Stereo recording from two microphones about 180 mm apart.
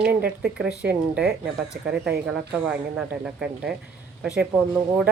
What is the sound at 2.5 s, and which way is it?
Speech, 5° right (ahead or behind).